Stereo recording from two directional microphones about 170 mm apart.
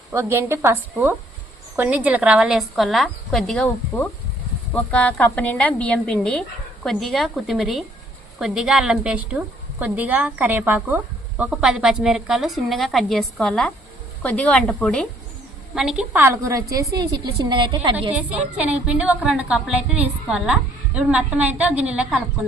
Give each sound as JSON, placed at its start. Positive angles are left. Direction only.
{"t": 0.1, "sound": "a woman's voice", "side_deg": -15}
{"t": 4.7, "sound": "a woman's voice", "side_deg": 10}
{"t": 16.2, "sound": "a woman's voice", "side_deg": -15}
{"t": 18.1, "sound": "a woman's voice", "side_deg": -5}